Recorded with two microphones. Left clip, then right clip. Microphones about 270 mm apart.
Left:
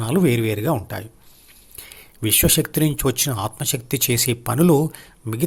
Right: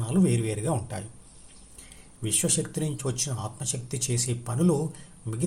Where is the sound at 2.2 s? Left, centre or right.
Left.